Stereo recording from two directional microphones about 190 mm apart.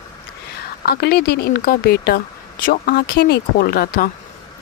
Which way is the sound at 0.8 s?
55° left (ahead or behind).